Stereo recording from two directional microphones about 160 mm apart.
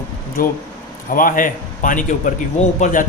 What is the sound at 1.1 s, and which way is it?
A man's voice, 60° left (ahead or behind).